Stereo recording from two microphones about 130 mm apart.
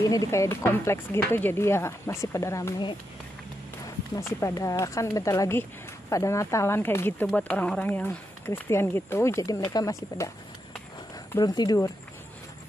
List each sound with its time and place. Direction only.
0.1 s speech: 25° left (ahead or behind)
4.1 s speech: 25° left (ahead or behind)
11.3 s speech: 30° left (ahead or behind)